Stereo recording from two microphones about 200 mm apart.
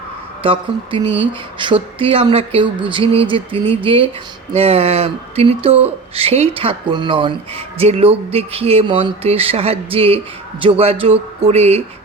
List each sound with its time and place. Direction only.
0.4 s speech: 25° right (ahead or behind)